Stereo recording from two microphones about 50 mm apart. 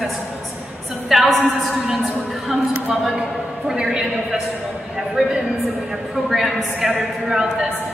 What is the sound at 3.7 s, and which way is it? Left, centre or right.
A man's voice, centre.